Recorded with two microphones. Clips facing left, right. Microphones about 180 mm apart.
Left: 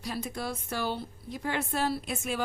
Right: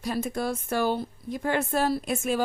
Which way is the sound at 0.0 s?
50° right (ahead or behind).